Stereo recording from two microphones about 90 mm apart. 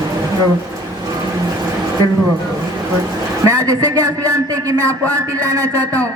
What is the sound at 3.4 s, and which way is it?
A man's voice, 40° right (ahead or behind).